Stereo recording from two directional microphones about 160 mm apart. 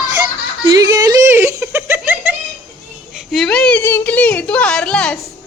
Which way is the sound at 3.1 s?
Centre (ahead or behind).